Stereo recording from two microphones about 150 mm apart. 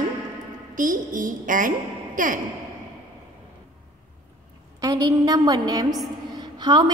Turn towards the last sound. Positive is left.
turn(degrees=-30)  # may be behind; listen again after turning